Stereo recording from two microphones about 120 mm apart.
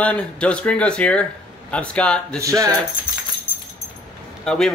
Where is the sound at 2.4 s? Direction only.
25° right (ahead or behind).